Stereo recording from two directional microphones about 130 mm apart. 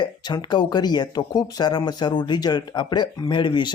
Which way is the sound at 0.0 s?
30° left (ahead or behind).